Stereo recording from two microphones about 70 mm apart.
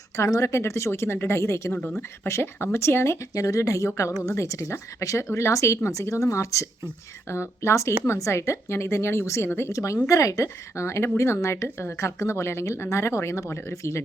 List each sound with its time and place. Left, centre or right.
0.3 s a woman's voice: left
3.3 s a woman's voice: left
9.7 s a woman's voice: left